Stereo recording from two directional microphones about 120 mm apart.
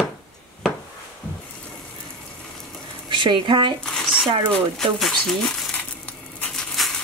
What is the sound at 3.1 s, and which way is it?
Speech, 40° right (ahead or behind).